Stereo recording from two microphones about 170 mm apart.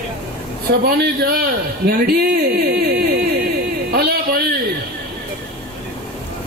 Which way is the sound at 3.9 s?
65° right (ahead or behind).